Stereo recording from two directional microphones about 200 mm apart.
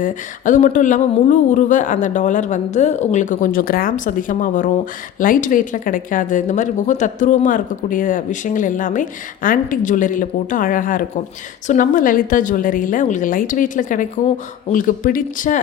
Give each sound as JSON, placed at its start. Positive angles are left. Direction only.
{"t": 0.0, "sound": "speech", "side_deg": 40}